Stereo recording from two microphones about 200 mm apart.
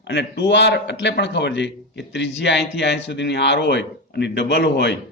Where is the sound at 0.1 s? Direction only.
60° left (ahead or behind).